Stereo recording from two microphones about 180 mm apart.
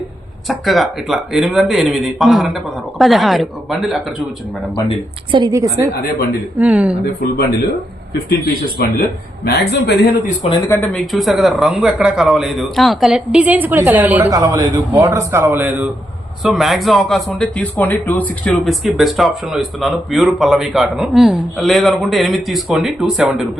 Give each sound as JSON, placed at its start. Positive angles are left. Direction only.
{"t": 0.4, "sound": "a man's voice", "side_deg": 0}
{"t": 5.3, "sound": "a woman's voice", "side_deg": -20}
{"t": 6.6, "sound": "a man's voice", "side_deg": -5}
{"t": 8.8, "sound": "speech", "side_deg": 60}
{"t": 10.5, "sound": "speech", "side_deg": 15}
{"t": 11.0, "sound": "a man's voice", "side_deg": 0}